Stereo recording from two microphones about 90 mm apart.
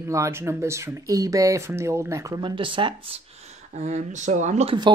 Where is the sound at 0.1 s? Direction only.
30° right (ahead or behind).